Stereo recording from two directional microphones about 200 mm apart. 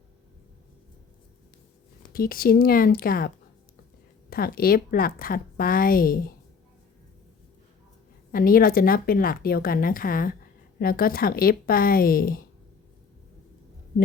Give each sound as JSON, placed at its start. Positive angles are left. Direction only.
{"t": 2.1, "sound": "a woman's voice", "side_deg": 45}
{"t": 8.3, "sound": "a woman's voice", "side_deg": 45}